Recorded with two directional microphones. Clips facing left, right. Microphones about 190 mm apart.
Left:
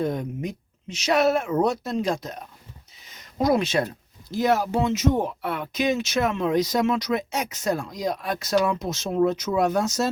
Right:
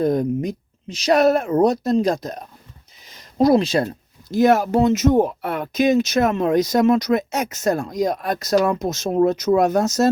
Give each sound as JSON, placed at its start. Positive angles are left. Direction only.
{"t": 0.0, "sound": "speech", "side_deg": -40}
{"t": 4.4, "sound": "speech", "side_deg": -50}